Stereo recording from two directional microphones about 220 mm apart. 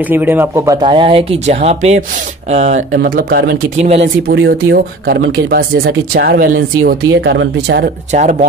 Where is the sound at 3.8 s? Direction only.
30° right (ahead or behind).